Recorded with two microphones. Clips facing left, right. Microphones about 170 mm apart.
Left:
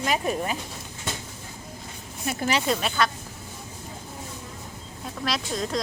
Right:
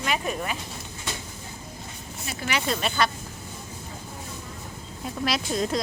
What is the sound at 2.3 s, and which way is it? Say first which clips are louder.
Speech: left 8 dB; 50° left (ahead or behind).